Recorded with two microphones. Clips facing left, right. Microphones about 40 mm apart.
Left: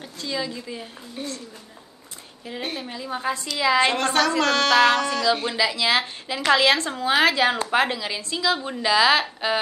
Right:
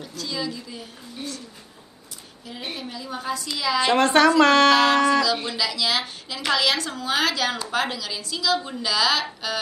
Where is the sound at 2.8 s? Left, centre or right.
Left.